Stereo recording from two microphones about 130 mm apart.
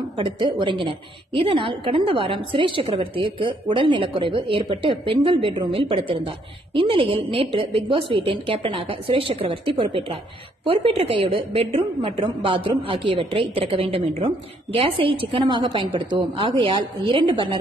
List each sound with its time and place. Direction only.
0.2 s a woman's voice: 40° right (ahead or behind)